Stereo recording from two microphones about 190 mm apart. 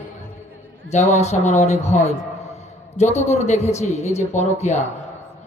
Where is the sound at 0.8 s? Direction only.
35° left (ahead or behind).